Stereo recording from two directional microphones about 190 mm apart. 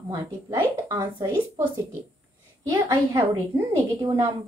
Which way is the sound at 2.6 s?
20° right (ahead or behind).